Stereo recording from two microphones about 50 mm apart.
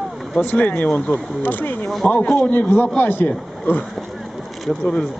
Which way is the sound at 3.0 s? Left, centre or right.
Left.